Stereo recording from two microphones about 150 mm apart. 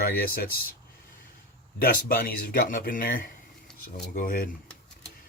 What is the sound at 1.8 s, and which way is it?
Speech, 85° left.